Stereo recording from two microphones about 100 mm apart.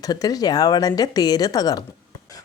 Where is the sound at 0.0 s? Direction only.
40° left (ahead or behind).